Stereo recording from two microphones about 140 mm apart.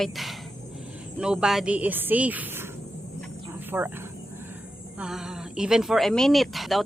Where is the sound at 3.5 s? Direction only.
15° right (ahead or behind).